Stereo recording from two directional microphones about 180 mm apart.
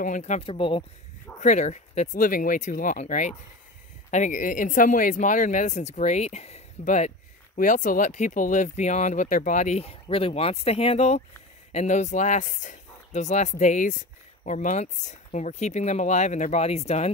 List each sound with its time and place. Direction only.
0.0 s speech: 40° left (ahead or behind)
1.4 s speech: 40° left (ahead or behind)